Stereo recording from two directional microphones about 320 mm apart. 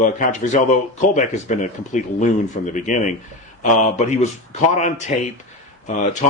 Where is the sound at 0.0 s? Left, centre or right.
Left.